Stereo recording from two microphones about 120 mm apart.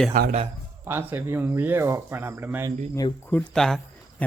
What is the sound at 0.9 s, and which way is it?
Speech, 15° right (ahead or behind).